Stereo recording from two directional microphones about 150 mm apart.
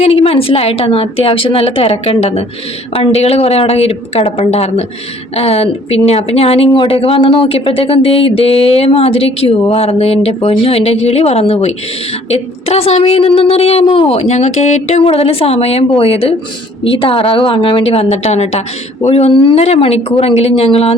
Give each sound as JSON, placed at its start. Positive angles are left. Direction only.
{"t": 0.0, "sound": "a woman's voice", "side_deg": 40}